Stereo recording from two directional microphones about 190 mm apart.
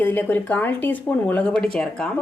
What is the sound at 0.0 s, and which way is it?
Speech, 10° left (ahead or behind).